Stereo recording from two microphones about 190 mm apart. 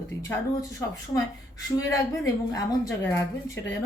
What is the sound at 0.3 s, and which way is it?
Speech, 15° left (ahead or behind).